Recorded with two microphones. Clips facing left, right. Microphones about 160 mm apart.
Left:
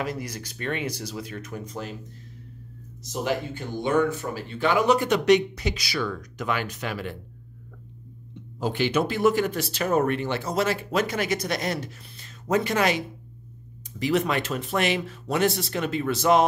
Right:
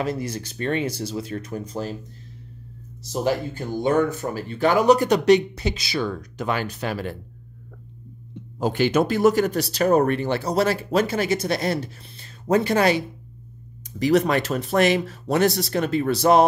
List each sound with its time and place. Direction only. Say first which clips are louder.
0.0 s speech: right 5 dB; 30° right (ahead or behind)
3.0 s speech: right 4 dB; 35° right (ahead or behind)
8.5 s speech: right 4 dB; 45° right (ahead or behind)